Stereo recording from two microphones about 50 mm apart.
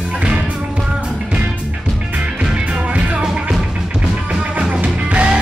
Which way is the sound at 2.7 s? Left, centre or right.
Right.